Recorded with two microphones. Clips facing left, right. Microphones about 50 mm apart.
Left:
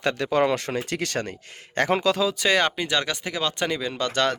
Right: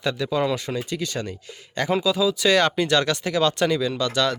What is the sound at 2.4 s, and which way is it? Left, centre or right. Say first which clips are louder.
Speech: right 3 dB; left.